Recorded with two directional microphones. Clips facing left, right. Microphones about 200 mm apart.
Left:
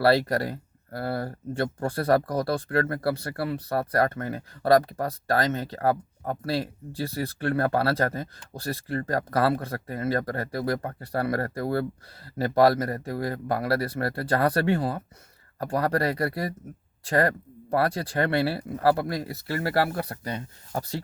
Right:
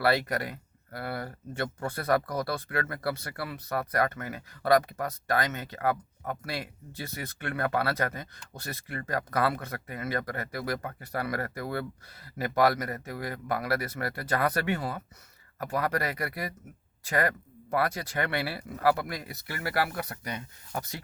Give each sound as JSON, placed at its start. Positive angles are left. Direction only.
{"t": 0.0, "sound": "speech", "side_deg": 30}